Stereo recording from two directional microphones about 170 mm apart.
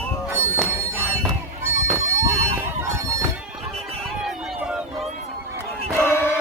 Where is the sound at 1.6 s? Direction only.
15° right (ahead or behind).